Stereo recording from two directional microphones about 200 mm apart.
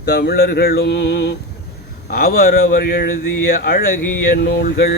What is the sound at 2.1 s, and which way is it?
Speech, 45° left (ahead or behind).